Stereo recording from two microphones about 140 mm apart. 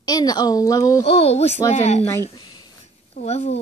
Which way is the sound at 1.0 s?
45° left (ahead or behind).